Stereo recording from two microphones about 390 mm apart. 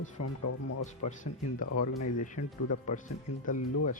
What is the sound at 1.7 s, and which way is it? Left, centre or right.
Speech, left.